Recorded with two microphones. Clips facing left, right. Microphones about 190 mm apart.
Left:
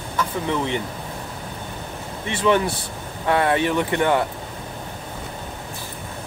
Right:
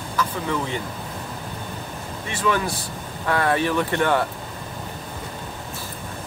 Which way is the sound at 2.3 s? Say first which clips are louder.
Left 4 dB; 25° left (ahead or behind).